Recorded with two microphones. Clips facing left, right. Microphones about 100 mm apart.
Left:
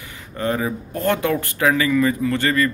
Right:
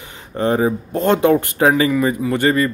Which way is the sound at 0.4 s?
30° right (ahead or behind).